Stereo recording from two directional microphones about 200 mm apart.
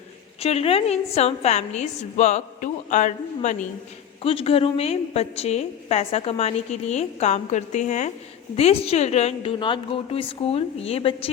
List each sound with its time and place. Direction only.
0.3 s a woman's voice: 30° left (ahead or behind)